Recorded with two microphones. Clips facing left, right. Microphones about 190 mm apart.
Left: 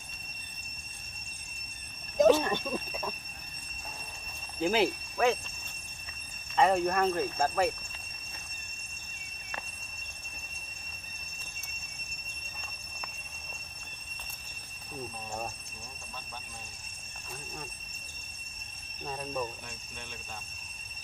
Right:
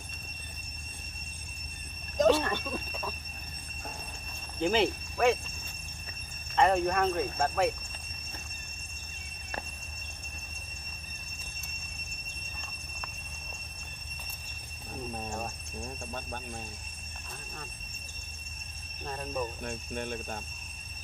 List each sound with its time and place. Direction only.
2.1 s a sound: 10° left (ahead or behind)
4.6 s speech: centre (ahead or behind)
6.5 s speech: centre (ahead or behind)
19.0 s speech: centre (ahead or behind)
19.6 s speech: 55° right (ahead or behind)